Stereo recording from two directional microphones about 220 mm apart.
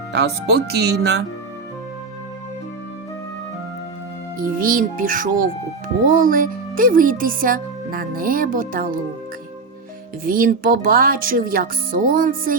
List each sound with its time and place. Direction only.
0.1 s speech: 50° right (ahead or behind)
4.4 s speech: 40° right (ahead or behind)
10.2 s speech: 40° right (ahead or behind)